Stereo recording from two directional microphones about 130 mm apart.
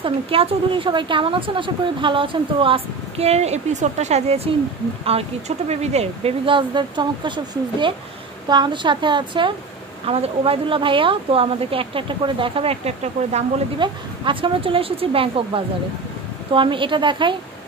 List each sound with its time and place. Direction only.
0.0 s speech: 45° right (ahead or behind)
10.0 s speech: 50° right (ahead or behind)
13.7 s speech: 40° right (ahead or behind)